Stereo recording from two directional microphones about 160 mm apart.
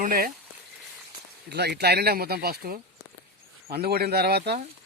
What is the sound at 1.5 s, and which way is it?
Speech, 90° right.